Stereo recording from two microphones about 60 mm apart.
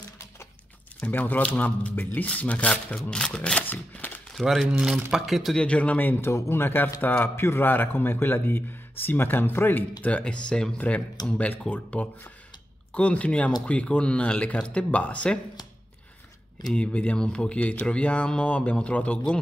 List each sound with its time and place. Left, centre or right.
1.0 s a man's voice: left
3.6 s speech: left
4.4 s speech: centre
5.6 s a man's voice: left
6.2 s speech: left
10.0 s speech: centre
11.2 s a man's voice: left
16.7 s a man's voice: centre